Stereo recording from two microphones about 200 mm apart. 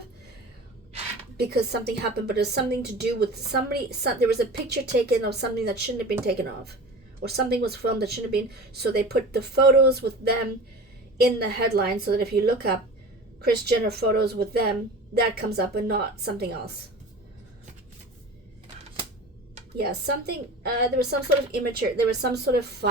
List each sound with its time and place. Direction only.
1.4 s a woman's voice: 55° right (ahead or behind)
7.2 s a woman's voice: 55° right (ahead or behind)
19.7 s a woman's voice: 55° right (ahead or behind)